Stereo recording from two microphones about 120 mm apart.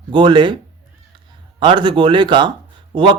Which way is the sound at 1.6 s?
40° right (ahead or behind).